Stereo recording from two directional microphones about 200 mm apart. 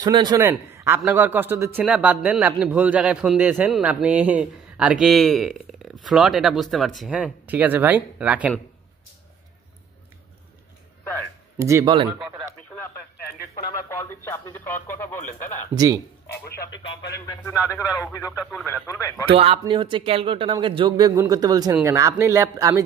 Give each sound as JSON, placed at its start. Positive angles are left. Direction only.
{"t": 0.0, "sound": "a man's voice", "side_deg": -20}
{"t": 11.5, "sound": "speech", "side_deg": -15}
{"t": 13.6, "sound": "speech", "side_deg": 15}
{"t": 15.7, "sound": "a man's voice", "side_deg": -20}
{"t": 16.4, "sound": "speech", "side_deg": 55}
{"t": 17.3, "sound": "speech", "side_deg": 15}
{"t": 19.3, "sound": "a man's voice", "side_deg": -30}